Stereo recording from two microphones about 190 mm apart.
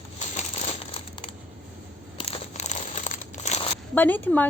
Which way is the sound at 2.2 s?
35° left (ahead or behind).